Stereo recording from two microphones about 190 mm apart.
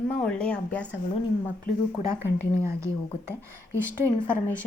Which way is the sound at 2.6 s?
15° right (ahead or behind).